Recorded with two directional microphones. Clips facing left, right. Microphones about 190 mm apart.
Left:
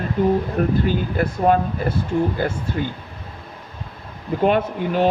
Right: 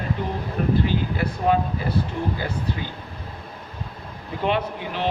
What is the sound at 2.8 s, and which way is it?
Speech, 55° left (ahead or behind).